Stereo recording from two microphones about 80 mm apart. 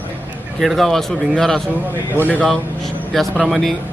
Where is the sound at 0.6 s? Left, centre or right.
Centre.